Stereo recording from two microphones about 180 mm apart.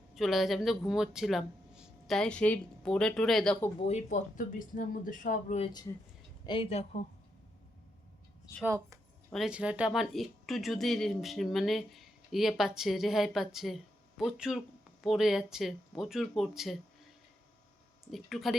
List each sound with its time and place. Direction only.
0.1 s speech: centre (ahead or behind)
3.8 s speech: 35° left (ahead or behind)
6.4 s speech: 30° left (ahead or behind)
8.6 s speech: 15° right (ahead or behind)
9.3 s speech: 5° right (ahead or behind)
18.1 s speech: centre (ahead or behind)